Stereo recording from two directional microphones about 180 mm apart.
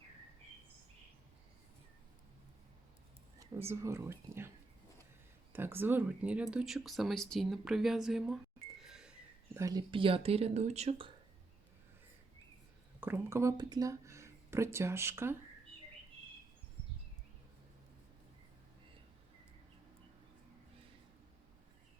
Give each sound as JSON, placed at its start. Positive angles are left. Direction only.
{"t": 3.7, "sound": "speech", "side_deg": -15}
{"t": 5.5, "sound": "speech", "side_deg": -10}
{"t": 8.8, "sound": "a sound", "side_deg": -5}
{"t": 9.6, "sound": "speech", "side_deg": -20}
{"t": 13.0, "sound": "speech", "side_deg": -10}